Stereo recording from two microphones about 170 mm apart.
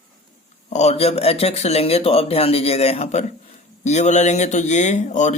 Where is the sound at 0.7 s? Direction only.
40° left (ahead or behind).